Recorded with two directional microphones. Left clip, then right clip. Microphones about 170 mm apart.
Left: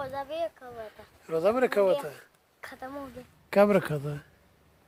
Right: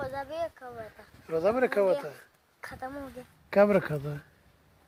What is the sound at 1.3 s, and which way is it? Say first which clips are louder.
Speech: left 1 dB; centre (ahead or behind).